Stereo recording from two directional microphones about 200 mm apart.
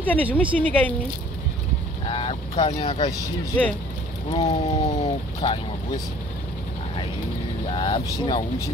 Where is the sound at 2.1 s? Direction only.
25° left (ahead or behind).